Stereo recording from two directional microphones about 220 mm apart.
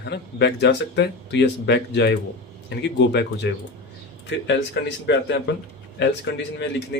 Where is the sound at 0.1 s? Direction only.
50° left (ahead or behind).